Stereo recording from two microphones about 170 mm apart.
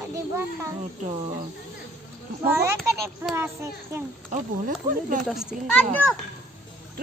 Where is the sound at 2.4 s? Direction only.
15° right (ahead or behind).